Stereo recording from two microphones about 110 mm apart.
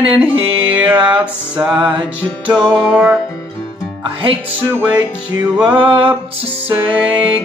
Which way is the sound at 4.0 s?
50° right (ahead or behind).